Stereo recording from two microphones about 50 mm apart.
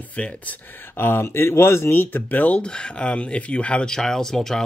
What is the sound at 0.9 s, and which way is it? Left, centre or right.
Speech, left.